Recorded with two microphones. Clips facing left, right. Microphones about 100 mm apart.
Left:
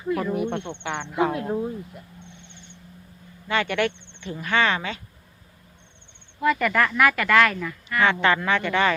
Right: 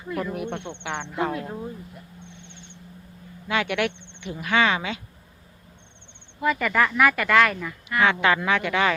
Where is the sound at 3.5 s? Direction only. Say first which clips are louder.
Left 1 dB; 5° right (ahead or behind).